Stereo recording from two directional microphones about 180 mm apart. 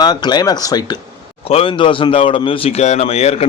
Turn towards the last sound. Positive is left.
turn(degrees=35)  # may be behind; listen again after turning